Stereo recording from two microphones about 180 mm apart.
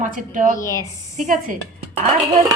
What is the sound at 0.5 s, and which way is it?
Speech, 20° left (ahead or behind).